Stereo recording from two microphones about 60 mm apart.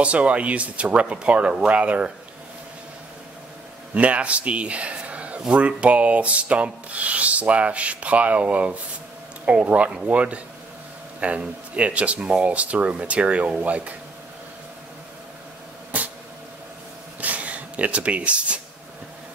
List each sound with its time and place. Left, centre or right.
0.0 s rub: right
3.9 s speech: right
5.5 s rub: right
17.2 s a sound: right